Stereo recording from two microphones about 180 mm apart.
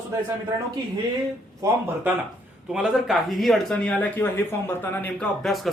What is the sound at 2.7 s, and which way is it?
Speech, 5° right (ahead or behind).